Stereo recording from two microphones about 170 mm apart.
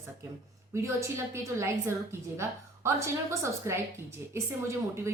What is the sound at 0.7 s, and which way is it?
A woman's voice, 15° right (ahead or behind).